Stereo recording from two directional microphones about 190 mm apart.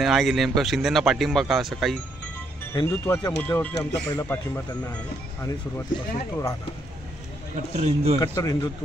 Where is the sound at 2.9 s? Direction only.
15° left (ahead or behind).